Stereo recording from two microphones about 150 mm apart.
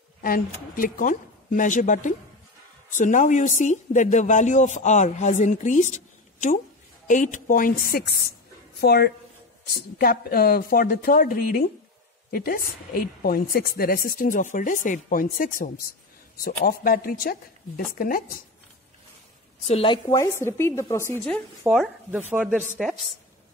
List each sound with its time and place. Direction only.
0.2 s a woman's voice: 65° left (ahead or behind)
7.1 s a woman's voice: 60° left (ahead or behind)
19.6 s a woman's voice: 40° left (ahead or behind)
20.1 s a woman's voice: 20° left (ahead or behind)
21.3 s a woman's voice: centre (ahead or behind)